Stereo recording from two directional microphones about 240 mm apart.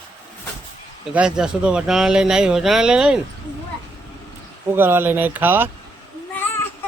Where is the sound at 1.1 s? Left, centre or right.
Centre.